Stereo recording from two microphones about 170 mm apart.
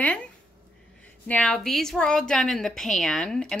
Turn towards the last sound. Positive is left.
turn(degrees=5)  # may be behind; listen again after turning